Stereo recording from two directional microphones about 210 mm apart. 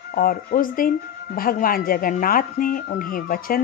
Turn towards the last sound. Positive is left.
turn(degrees=40)  # may be behind; listen again after turning